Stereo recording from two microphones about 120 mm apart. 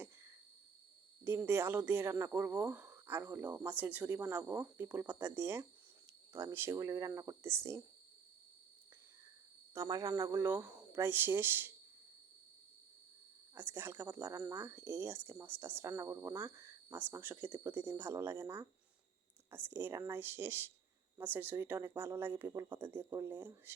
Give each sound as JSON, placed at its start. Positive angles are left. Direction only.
{"t": 1.2, "sound": "speech", "side_deg": -20}
{"t": 2.7, "sound": "a sound", "side_deg": -20}
{"t": 3.3, "sound": "speech", "side_deg": -15}
{"t": 9.7, "sound": "speech", "side_deg": -30}
{"t": 13.6, "sound": "speech", "side_deg": -20}